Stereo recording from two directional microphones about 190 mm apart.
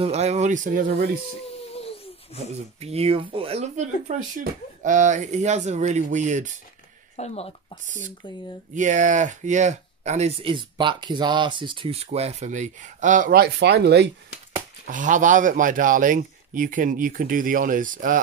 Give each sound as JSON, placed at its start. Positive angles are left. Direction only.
{"t": 0.0, "sound": "speech", "side_deg": -35}
{"t": 1.7, "sound": "a sound", "side_deg": 30}
{"t": 2.3, "sound": "speech", "side_deg": -35}
{"t": 7.2, "sound": "speech", "side_deg": 35}
{"t": 8.7, "sound": "speech", "side_deg": -40}
{"t": 14.9, "sound": "speech", "side_deg": -40}